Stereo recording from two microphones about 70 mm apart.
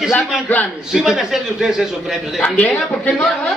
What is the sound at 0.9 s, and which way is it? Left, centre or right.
A man's voice, centre.